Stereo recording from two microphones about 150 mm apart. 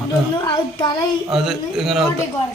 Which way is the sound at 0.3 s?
30° left (ahead or behind).